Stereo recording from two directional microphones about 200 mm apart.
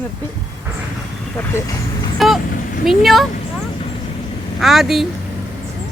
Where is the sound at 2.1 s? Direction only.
Centre (ahead or behind).